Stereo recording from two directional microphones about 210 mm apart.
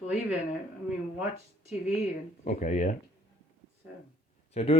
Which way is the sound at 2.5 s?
35° left (ahead or behind).